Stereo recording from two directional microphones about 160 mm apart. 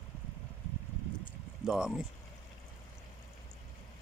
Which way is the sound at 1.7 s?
5° right (ahead or behind).